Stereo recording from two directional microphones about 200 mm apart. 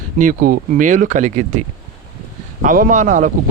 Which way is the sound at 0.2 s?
45° right (ahead or behind).